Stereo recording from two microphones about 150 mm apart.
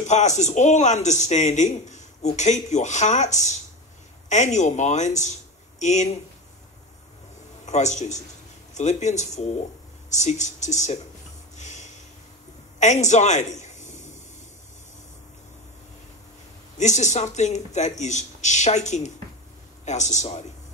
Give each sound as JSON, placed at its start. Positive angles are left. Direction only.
{"t": 0.0, "sound": "speech", "side_deg": 50}
{"t": 7.6, "sound": "speech", "side_deg": 50}
{"t": 11.5, "sound": "a sound", "side_deg": 50}
{"t": 16.7, "sound": "speech", "side_deg": 50}